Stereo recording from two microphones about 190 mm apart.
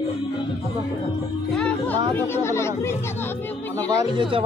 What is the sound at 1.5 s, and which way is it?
Speech, 5° left (ahead or behind).